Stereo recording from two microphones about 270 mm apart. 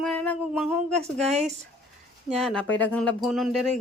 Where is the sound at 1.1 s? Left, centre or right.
Right.